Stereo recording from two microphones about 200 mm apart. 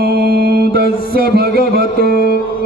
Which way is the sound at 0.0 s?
50° right (ahead or behind).